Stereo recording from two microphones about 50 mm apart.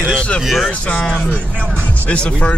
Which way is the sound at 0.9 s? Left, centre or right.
Centre.